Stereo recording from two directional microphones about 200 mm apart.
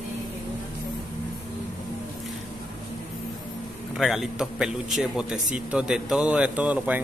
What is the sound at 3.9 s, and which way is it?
A man's voice, centre (ahead or behind).